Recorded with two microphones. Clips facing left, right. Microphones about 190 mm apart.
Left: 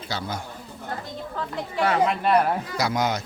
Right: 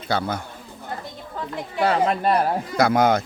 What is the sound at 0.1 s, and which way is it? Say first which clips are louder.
Speech: right 7 dB; 55° right (ahead or behind).